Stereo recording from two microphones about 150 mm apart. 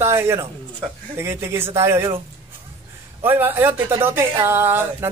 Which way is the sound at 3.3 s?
15° right (ahead or behind).